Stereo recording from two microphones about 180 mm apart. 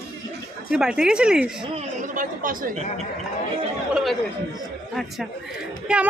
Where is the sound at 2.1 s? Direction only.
50° right (ahead or behind).